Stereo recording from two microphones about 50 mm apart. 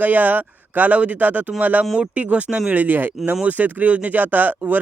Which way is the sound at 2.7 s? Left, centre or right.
Right.